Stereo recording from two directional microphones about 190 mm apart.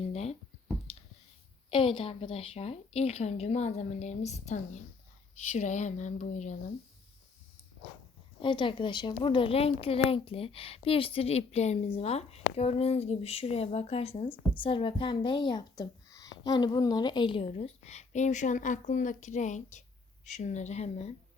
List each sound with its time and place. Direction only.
0.1 s a sound: 35° left (ahead or behind)
1.7 s a woman's voice: 25° left (ahead or behind)
8.4 s a woman's voice: 25° left (ahead or behind)